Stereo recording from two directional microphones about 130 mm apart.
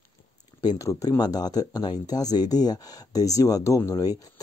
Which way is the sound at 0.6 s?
30° left (ahead or behind).